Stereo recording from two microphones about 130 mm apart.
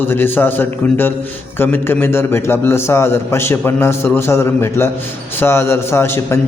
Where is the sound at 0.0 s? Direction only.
15° left (ahead or behind).